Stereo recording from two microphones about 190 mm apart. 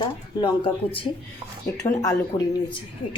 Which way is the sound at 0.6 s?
25° left (ahead or behind).